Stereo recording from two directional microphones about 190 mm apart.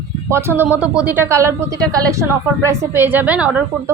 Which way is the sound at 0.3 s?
15° right (ahead or behind).